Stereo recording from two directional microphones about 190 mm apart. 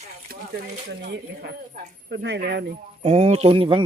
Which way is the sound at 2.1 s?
65° right (ahead or behind).